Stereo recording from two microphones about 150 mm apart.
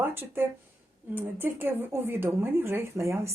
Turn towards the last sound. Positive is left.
turn(degrees=-20)  # may be behind; listen again after turning